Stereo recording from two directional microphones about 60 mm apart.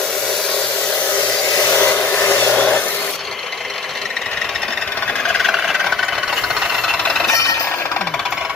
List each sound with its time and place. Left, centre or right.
1.6 s hair dryer: left
2.5 s vehicle: centre
5.4 s engine: centre